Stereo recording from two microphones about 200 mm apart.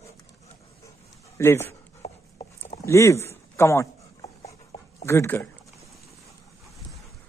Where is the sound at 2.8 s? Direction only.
15° left (ahead or behind).